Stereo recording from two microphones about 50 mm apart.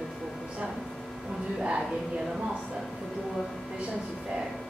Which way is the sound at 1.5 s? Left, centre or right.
Centre.